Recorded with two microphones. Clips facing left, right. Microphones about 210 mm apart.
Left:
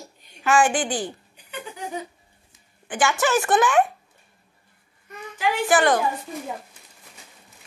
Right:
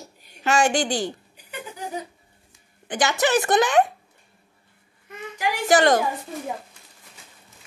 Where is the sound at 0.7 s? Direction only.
40° right (ahead or behind).